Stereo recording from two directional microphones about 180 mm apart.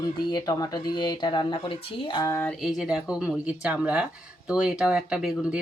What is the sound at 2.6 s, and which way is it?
Speech, centre (ahead or behind).